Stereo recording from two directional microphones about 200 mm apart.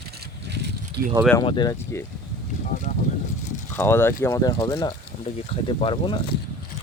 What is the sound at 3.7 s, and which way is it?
Speech, 10° left (ahead or behind).